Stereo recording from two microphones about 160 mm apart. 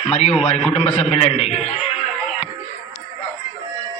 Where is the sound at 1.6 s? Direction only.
45° left (ahead or behind).